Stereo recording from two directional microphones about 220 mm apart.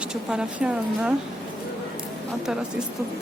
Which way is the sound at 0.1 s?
5° right (ahead or behind).